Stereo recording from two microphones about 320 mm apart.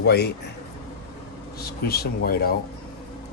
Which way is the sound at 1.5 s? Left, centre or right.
Left.